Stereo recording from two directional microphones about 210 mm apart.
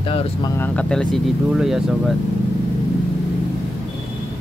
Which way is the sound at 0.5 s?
10° left (ahead or behind).